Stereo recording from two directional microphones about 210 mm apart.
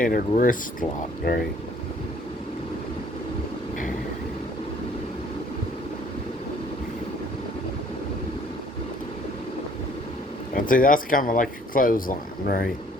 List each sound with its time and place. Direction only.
0.0 s speech: 40° left (ahead or behind)
10.5 s speech: 40° left (ahead or behind)